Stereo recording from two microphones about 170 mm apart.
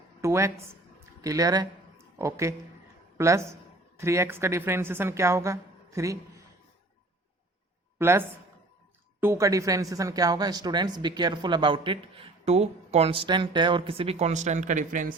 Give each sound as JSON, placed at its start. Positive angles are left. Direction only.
{"t": 0.2, "sound": "a sound", "side_deg": -15}
{"t": 1.2, "sound": "a man's voice", "side_deg": -20}
{"t": 7.9, "sound": "a woman's voice", "side_deg": -15}